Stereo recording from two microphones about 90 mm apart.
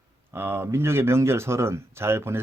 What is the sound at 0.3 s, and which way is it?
Speech, 25° right (ahead or behind).